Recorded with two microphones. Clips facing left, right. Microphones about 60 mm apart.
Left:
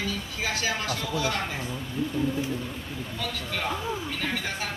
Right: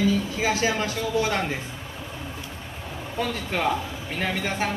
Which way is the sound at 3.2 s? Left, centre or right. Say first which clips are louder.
Right 7 dB; right.